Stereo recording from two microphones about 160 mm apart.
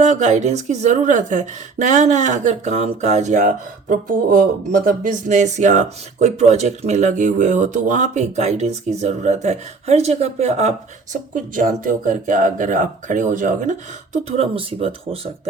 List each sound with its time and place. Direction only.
0.0 s speech: 45° right (ahead or behind)
14.3 s speech: 40° right (ahead or behind)